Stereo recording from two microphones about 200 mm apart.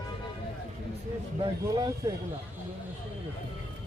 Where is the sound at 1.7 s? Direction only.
15° right (ahead or behind).